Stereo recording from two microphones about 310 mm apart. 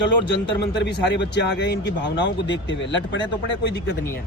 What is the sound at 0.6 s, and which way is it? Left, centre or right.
Speech, left.